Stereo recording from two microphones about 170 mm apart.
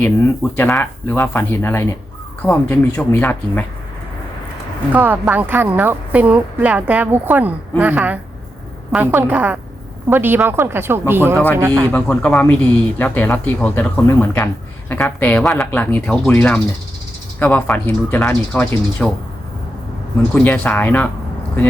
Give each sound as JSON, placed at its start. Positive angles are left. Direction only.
{"t": 0.0, "sound": "speech", "side_deg": 10}
{"t": 4.9, "sound": "a woman's voice", "side_deg": -10}
{"t": 11.9, "sound": "speech", "side_deg": 10}
{"t": 20.3, "sound": "speech", "side_deg": 10}